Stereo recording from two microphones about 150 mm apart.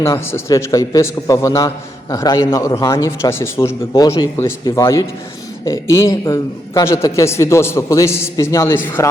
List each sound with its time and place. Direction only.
0.0 s a man's voice: 15° left (ahead or behind)